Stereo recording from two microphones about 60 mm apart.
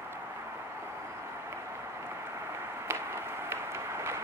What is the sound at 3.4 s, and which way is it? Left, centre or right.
Vehicle, right.